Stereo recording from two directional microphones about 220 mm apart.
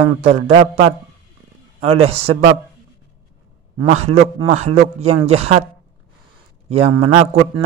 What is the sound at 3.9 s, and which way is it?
A man's voice, 30° right (ahead or behind).